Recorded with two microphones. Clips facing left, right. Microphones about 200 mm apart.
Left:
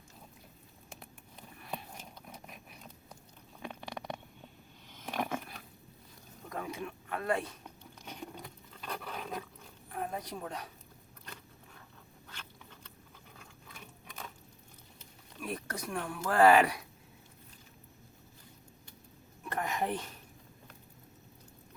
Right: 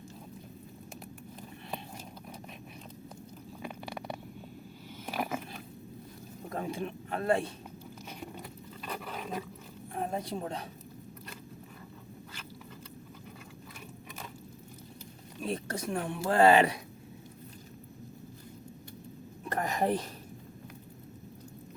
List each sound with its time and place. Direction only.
3.6 s a sound: 5° right (ahead or behind)
6.5 s speech: 30° right (ahead or behind)
8.0 s dog: 5° right (ahead or behind)
9.9 s a woman's voice: 25° right (ahead or behind)
15.4 s speech: 25° right (ahead or behind)
19.5 s a sound: 35° right (ahead or behind)